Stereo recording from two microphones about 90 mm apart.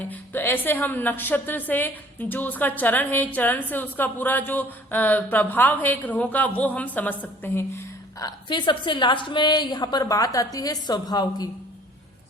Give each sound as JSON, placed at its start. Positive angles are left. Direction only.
{"t": 0.0, "sound": "a woman's voice", "side_deg": 20}
{"t": 8.4, "sound": "a woman's voice", "side_deg": 60}